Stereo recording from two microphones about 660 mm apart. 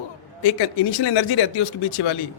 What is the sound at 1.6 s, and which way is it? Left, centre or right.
Speech, left.